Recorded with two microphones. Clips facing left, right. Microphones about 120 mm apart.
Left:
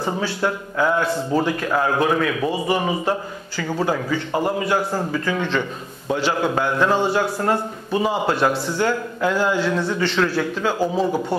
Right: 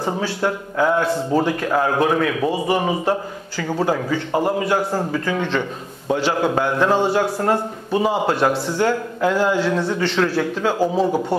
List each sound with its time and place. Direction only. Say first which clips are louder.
0.2 s a man's voice: right 1 dB; 40° right (ahead or behind)
9.8 s a man's voice: right 1 dB; 40° right (ahead or behind)
11.1 s a man's voice: right 2 dB; 20° right (ahead or behind)